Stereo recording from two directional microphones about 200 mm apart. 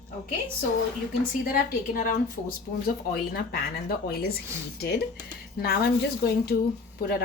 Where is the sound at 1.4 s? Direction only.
45° left (ahead or behind).